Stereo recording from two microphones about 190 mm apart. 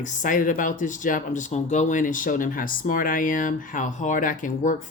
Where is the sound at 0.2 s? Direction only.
45° left (ahead or behind).